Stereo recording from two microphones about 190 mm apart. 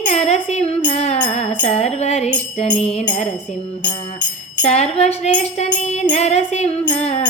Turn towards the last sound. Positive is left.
turn(degrees=35)  # may be behind; listen again after turning